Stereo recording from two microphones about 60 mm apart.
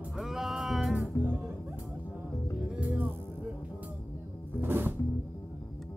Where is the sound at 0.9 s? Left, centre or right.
Right.